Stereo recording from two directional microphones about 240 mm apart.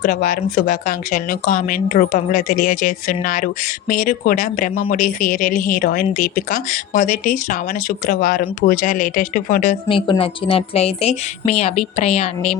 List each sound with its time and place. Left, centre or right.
0.0 s speech: left